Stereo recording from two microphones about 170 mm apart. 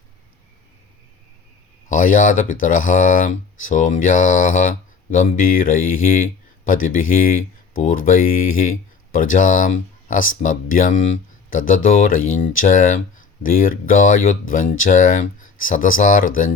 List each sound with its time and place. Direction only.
1.9 s speech: 50° left (ahead or behind)